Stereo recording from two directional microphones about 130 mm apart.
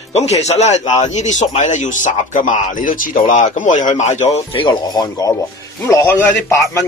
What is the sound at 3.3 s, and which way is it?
Speech, 80° left.